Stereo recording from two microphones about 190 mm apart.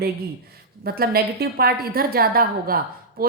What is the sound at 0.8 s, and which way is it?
A woman's voice, 55° right (ahead or behind).